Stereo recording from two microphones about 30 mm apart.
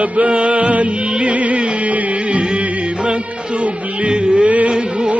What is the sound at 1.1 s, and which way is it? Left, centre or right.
Music, right.